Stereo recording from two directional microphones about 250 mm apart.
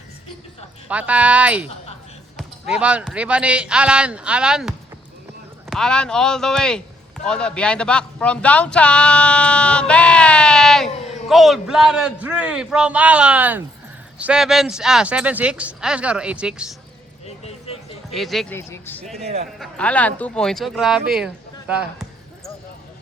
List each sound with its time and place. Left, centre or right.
0.9 s speech: centre
2.7 s speech: centre
17.2 s a sound: left
18.1 s speech: centre
19.2 s a man's voice: right
19.5 s speech: centre